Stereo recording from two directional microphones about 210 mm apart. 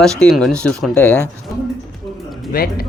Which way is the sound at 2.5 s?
45° left (ahead or behind).